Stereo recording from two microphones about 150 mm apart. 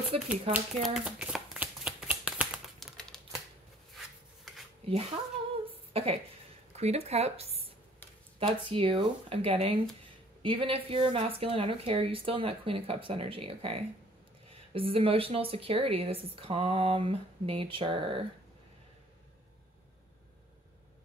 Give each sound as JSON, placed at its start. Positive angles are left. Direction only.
{"t": 0.3, "sound": "shuffling cards", "side_deg": -5}
{"t": 3.0, "sound": "typewriter", "side_deg": 5}
{"t": 5.7, "sound": "a sound", "side_deg": -40}
{"t": 6.7, "sound": "a woman's voice", "side_deg": -45}